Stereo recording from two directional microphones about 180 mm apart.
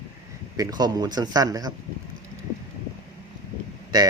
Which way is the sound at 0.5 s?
20° right (ahead or behind).